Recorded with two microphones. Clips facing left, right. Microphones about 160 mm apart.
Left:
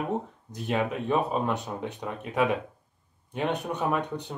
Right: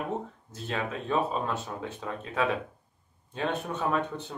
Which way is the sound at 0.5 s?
15° left (ahead or behind).